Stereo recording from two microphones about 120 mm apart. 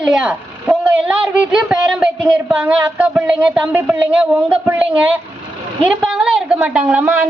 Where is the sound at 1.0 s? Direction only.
10° right (ahead or behind).